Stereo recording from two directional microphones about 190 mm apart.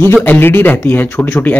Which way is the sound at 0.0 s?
10° left (ahead or behind).